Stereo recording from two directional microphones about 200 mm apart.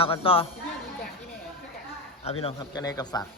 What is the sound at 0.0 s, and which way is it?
Speech, 25° left (ahead or behind).